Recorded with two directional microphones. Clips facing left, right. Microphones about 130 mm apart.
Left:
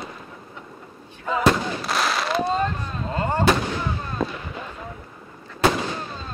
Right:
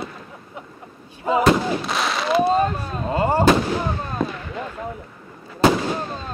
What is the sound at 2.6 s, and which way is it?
Speech, 15° right (ahead or behind).